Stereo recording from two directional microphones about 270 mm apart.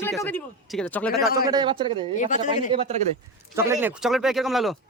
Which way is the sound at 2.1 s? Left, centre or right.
Left.